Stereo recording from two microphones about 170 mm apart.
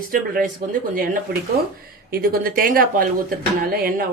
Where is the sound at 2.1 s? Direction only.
60° right (ahead or behind).